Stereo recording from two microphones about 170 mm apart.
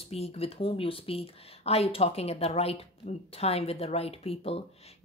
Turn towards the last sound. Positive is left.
turn(degrees=35)  # may be behind; listen again after turning